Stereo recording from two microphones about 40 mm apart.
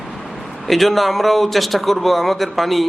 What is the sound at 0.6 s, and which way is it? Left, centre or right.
Speech, centre.